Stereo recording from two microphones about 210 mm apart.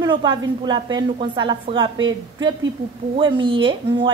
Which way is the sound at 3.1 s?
25° right (ahead or behind).